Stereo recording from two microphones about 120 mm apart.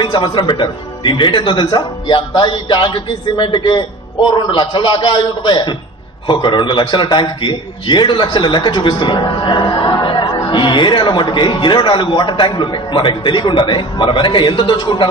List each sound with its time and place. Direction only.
0.0 s a man's voice: 40° left (ahead or behind)